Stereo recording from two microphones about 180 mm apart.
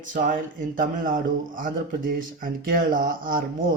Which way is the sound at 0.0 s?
45° right (ahead or behind).